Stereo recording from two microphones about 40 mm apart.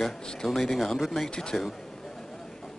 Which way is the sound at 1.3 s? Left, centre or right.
Centre.